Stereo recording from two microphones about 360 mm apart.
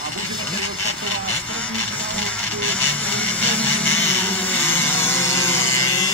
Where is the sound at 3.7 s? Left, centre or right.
Centre.